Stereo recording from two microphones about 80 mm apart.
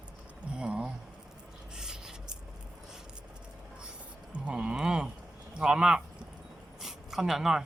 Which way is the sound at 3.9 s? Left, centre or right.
Centre.